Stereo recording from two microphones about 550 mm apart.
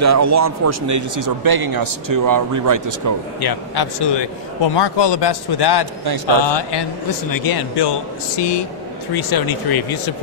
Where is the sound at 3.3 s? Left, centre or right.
Left.